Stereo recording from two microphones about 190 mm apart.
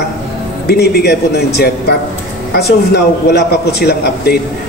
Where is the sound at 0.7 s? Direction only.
55° left (ahead or behind).